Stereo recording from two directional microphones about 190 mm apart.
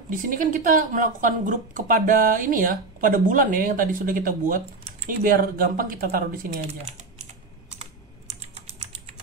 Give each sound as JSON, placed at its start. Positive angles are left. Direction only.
{"t": 0.1, "sound": "a woman's voice", "side_deg": -45}
{"t": 6.6, "sound": "speech", "side_deg": -35}
{"t": 7.8, "sound": "typing", "side_deg": -35}